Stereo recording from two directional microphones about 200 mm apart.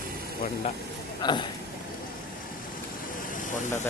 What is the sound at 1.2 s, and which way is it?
Speech, 25° left (ahead or behind).